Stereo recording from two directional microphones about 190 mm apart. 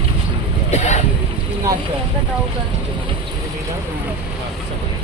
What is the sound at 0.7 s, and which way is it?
Boat, 40° left (ahead or behind).